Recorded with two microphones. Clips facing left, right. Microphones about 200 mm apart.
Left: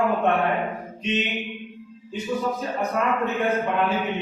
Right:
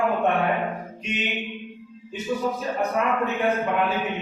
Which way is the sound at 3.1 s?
Centre (ahead or behind).